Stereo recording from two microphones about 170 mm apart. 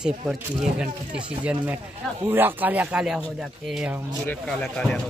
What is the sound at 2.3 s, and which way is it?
Speech, 10° right (ahead or behind).